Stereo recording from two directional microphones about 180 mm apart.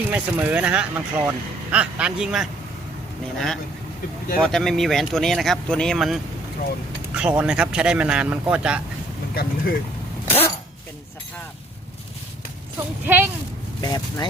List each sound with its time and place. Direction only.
0.1 s speech: 10° right (ahead or behind)
9.3 s speech: 60° left (ahead or behind)
13.1 s speech: 10° right (ahead or behind)
13.8 s speech: 20° left (ahead or behind)